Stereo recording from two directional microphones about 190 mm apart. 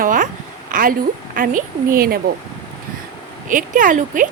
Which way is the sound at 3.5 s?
45° right (ahead or behind).